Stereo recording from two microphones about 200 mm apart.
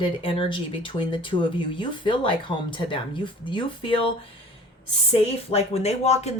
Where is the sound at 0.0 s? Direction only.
25° left (ahead or behind).